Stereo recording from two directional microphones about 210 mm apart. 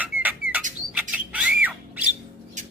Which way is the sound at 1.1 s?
5° right (ahead or behind).